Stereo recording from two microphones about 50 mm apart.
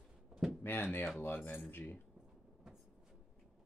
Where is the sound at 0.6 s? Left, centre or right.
Left.